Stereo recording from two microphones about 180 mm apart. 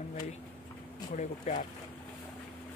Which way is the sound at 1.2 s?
45° left (ahead or behind).